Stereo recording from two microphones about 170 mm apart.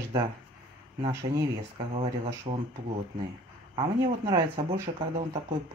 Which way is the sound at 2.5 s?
35° right (ahead or behind).